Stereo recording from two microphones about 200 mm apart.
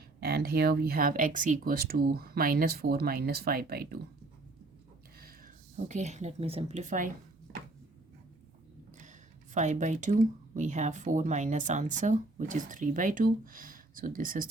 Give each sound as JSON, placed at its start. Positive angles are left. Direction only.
{"t": 0.2, "sound": "speech", "side_deg": -50}
{"t": 5.1, "sound": "speech", "side_deg": -45}
{"t": 9.6, "sound": "speech", "side_deg": -35}